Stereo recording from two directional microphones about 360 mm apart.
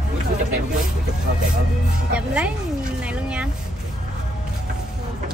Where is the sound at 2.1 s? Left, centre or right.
Centre.